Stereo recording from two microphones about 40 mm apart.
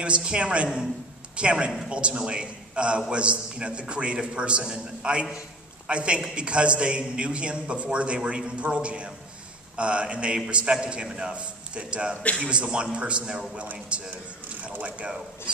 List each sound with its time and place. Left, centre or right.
0.0 s a man's voice: right